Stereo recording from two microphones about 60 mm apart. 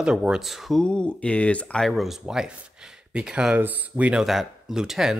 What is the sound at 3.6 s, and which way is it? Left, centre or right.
Speech, right.